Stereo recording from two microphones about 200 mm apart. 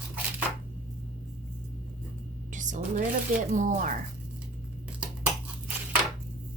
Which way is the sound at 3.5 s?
40° right (ahead or behind).